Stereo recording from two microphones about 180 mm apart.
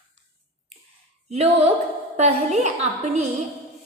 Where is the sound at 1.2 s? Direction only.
35° right (ahead or behind).